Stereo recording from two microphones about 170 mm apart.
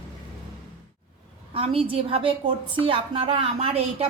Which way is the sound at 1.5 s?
35° right (ahead or behind).